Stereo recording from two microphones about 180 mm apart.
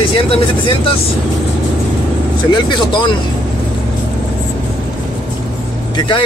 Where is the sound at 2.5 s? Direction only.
25° left (ahead or behind).